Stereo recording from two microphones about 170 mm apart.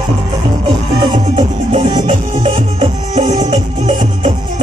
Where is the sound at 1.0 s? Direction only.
30° right (ahead or behind).